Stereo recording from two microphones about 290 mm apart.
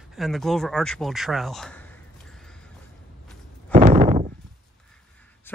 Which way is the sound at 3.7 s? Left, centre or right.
Centre.